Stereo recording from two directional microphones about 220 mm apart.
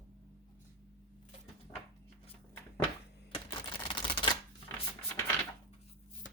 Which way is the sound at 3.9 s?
20° left (ahead or behind).